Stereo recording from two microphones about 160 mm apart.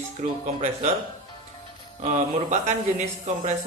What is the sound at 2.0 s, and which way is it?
Speech, 45° right (ahead or behind).